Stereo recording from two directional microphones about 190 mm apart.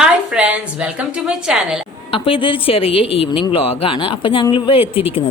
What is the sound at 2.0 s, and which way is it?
A woman's voice, 30° left (ahead or behind).